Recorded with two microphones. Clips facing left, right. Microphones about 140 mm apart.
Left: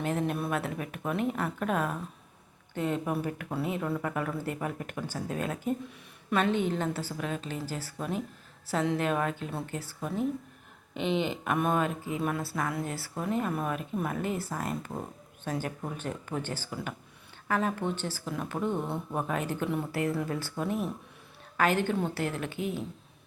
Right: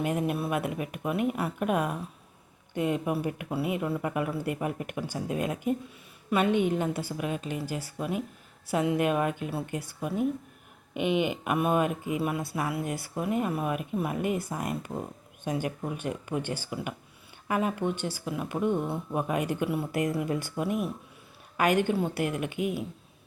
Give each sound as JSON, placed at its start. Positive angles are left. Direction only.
{"t": 0.0, "sound": "speech", "side_deg": -10}